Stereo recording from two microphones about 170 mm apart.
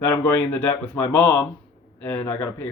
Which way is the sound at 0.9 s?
15° left (ahead or behind).